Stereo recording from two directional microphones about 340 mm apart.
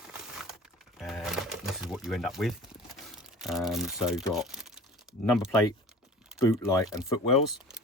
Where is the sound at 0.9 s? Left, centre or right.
Centre.